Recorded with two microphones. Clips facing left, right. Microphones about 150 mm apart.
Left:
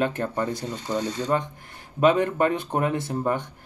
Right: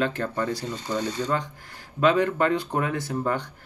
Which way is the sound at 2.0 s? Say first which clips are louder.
Left 1 dB; 20° left (ahead or behind).